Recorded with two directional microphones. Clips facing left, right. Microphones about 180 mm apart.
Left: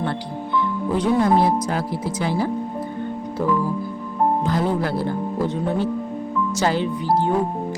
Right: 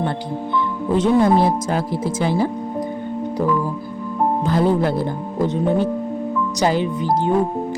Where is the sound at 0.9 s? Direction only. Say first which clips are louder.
Right 3 dB; 25° right (ahead or behind).